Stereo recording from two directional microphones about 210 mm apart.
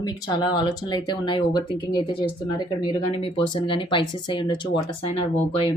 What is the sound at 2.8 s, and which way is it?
A woman's voice, 20° left (ahead or behind).